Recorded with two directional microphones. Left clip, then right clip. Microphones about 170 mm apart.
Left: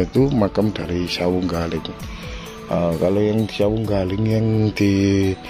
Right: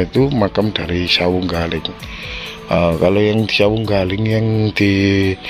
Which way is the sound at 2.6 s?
10° right (ahead or behind).